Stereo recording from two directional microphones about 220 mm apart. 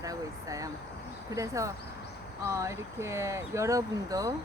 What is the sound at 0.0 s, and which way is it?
Speech, 15° right (ahead or behind).